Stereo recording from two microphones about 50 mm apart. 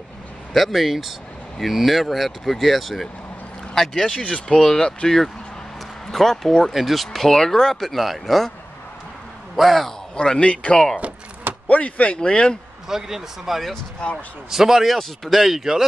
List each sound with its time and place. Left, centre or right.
0.5 s speech: centre
4.2 s speech: centre
6.7 s speech: centre
9.6 s speech: centre
10.1 s speech: centre
12.8 s speech: centre
14.0 s speech: left
14.5 s speech: centre